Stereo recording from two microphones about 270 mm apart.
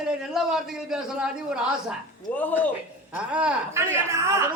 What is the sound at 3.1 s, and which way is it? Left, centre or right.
A woman's voice, centre.